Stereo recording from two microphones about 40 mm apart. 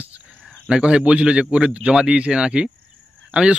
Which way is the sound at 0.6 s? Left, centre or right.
Right.